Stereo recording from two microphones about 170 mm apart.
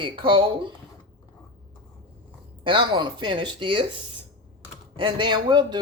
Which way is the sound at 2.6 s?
30° right (ahead or behind).